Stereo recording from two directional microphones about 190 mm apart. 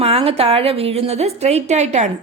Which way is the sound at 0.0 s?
30° right (ahead or behind).